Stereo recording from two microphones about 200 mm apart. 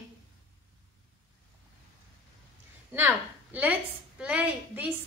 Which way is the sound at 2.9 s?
10° right (ahead or behind).